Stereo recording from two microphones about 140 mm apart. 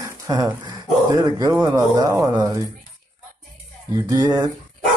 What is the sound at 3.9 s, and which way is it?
Speech, 25° right (ahead or behind).